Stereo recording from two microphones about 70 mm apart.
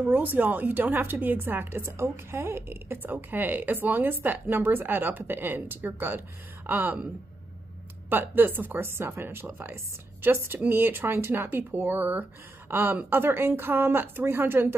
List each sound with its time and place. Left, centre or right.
0.0 s a woman's voice: right
8.1 s speech: right